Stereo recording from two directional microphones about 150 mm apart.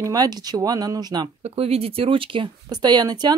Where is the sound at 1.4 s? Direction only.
40° right (ahead or behind).